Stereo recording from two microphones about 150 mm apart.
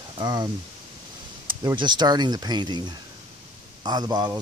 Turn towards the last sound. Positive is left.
turn(degrees=-25)  # may be behind; listen again after turning